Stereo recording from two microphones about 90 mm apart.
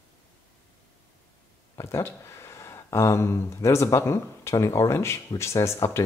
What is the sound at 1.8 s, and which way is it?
Speech, 30° left (ahead or behind).